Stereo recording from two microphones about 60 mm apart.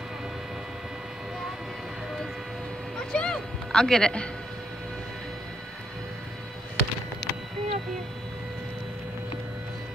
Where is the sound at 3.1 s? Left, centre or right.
Centre.